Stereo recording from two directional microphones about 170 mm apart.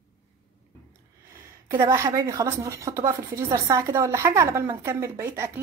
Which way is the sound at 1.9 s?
15° right (ahead or behind).